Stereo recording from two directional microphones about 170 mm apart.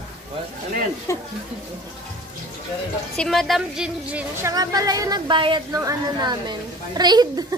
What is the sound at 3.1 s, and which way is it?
A woman's voice, centre (ahead or behind).